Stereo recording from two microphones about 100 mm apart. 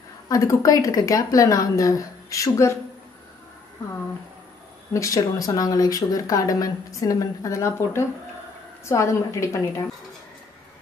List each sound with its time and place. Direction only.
0.3 s speech: 35° left (ahead or behind)
4.9 s speech: 35° left (ahead or behind)